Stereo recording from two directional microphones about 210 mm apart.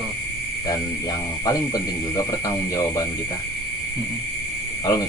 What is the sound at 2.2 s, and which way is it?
Speech, 15° left (ahead or behind).